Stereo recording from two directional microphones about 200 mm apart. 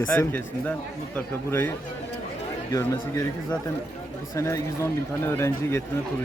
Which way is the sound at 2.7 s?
15° left (ahead or behind).